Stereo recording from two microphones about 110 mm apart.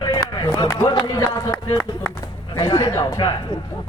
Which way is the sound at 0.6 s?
35° left (ahead or behind).